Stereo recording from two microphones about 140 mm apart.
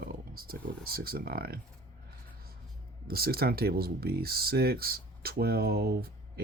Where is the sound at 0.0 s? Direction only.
90° right.